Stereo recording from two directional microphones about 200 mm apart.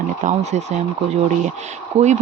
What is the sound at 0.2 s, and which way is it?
Speech, 40° right (ahead or behind).